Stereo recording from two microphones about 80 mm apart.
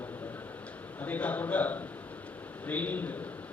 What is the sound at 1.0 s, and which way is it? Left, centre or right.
A man's voice, centre.